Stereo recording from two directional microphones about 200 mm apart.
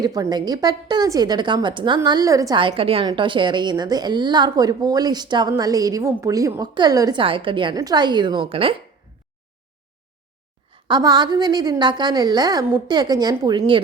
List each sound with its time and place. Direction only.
0.0 s a woman's voice: 20° right (ahead or behind)
10.8 s a woman's voice: 20° right (ahead or behind)